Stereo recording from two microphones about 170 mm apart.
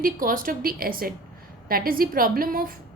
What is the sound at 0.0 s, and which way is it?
A woman's voice, 55° right (ahead or behind).